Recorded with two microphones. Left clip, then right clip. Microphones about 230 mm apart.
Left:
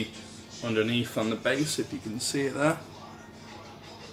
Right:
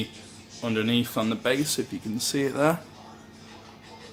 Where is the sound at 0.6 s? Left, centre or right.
Right.